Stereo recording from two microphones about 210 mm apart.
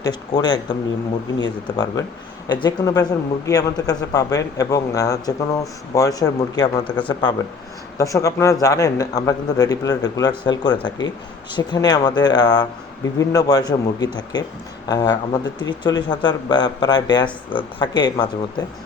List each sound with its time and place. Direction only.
0.0 s speech: 20° left (ahead or behind)
6.8 s speech: 5° left (ahead or behind)
7.1 s speech: 20° left (ahead or behind)